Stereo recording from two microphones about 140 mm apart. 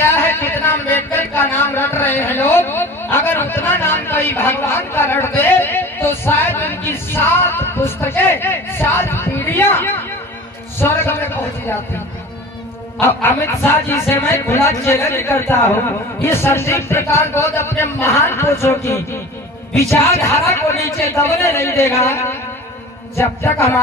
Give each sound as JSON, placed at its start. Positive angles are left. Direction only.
{"t": 0.0, "sound": "a sound", "side_deg": 15}
{"t": 10.8, "sound": "speech", "side_deg": 15}
{"t": 13.0, "sound": "speech", "side_deg": 15}